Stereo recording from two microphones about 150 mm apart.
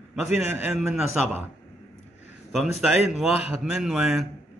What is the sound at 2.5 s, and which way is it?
A man's voice, centre (ahead or behind).